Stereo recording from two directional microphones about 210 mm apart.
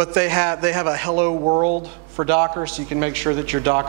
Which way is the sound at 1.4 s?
25° right (ahead or behind).